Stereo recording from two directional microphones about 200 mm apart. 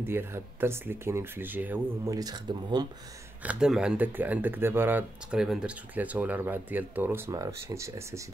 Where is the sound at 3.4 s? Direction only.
5° right (ahead or behind).